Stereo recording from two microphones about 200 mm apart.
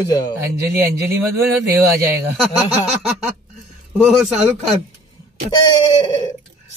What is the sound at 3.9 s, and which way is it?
Speech, 5° right (ahead or behind).